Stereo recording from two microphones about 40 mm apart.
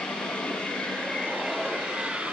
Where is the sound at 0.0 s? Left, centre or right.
Left.